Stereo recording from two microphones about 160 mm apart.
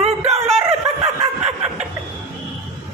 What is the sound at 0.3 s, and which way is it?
Dog, 40° right (ahead or behind).